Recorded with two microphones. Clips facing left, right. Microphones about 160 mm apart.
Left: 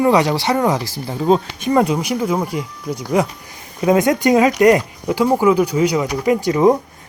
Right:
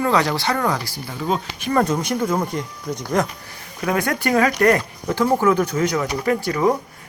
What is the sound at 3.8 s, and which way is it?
Speech, 20° left (ahead or behind).